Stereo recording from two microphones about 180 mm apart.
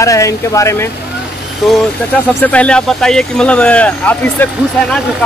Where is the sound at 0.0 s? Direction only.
15° left (ahead or behind).